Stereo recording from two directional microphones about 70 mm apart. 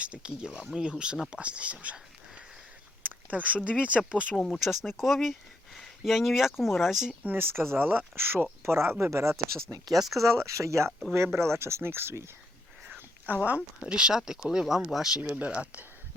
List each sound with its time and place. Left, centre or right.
0.0 s speech: centre
3.0 s speech: right
4.6 s speech: centre
7.3 s speech: right
9.9 s speech: centre
10.4 s speech: right
13.2 s speech: right
13.8 s speech: centre
15.2 s speech: right